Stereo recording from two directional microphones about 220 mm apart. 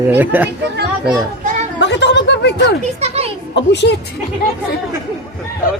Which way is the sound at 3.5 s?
50° left (ahead or behind).